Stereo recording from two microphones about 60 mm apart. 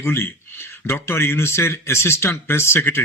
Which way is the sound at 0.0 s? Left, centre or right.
Left.